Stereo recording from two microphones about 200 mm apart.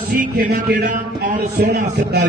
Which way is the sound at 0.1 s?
45° right (ahead or behind).